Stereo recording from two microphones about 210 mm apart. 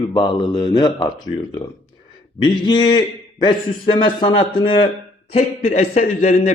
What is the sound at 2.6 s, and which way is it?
A man's voice, 20° left (ahead or behind).